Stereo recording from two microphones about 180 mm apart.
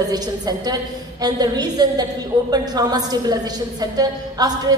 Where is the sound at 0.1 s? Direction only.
20° right (ahead or behind).